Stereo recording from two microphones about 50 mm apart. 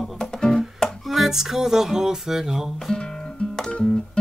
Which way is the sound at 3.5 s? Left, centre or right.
Centre.